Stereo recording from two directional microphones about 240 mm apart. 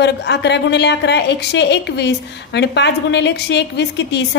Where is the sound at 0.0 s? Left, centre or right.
Left.